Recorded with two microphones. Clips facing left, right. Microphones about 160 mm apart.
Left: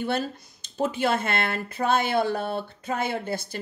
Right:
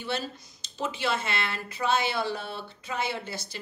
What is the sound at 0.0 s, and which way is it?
Speech, 50° left (ahead or behind).